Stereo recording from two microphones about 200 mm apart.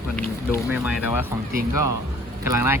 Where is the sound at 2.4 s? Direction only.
15° right (ahead or behind).